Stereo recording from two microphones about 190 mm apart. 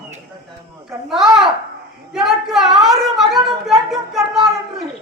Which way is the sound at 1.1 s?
Centre (ahead or behind).